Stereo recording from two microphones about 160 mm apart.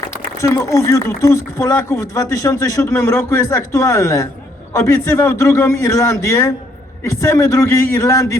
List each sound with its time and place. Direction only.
0.3 s speech: 20° left (ahead or behind)